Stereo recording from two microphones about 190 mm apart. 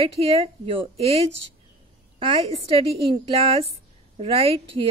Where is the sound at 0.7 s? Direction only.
30° right (ahead or behind).